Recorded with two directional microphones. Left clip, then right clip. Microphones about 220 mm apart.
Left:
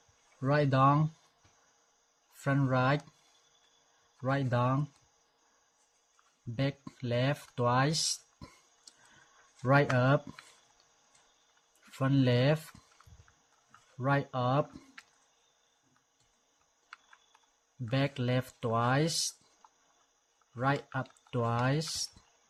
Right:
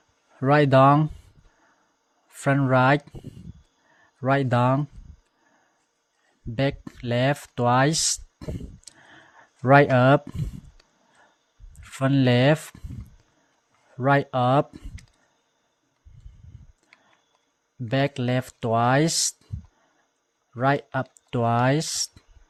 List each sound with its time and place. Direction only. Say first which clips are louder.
0.3 s speech: right 11 dB; 35° right (ahead or behind)
2.4 s speech: right 10 dB; 35° right (ahead or behind)
4.2 s speech: right 10 dB; 35° right (ahead or behind)
6.6 s speech: right 10 dB; 35° right (ahead or behind)
11.8 s speech: right 8 dB; 35° right (ahead or behind)
14.0 s speech: right 10 dB; 35° right (ahead or behind)
17.8 s speech: right 8 dB; 30° right (ahead or behind)
20.6 s speech: right 9 dB; 30° right (ahead or behind)